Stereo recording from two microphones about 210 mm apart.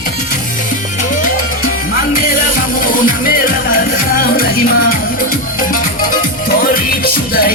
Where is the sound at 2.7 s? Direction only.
40° left (ahead or behind).